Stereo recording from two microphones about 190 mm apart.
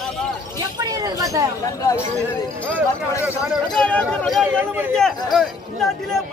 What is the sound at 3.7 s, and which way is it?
Speech, 5° left (ahead or behind).